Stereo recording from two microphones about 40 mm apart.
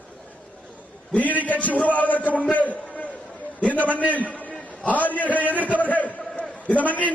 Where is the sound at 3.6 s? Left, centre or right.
Left.